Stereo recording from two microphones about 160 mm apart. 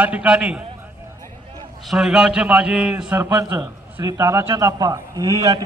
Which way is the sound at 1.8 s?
5° right (ahead or behind).